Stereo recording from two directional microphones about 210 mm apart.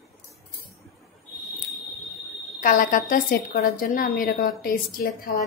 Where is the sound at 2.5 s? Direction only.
40° left (ahead or behind).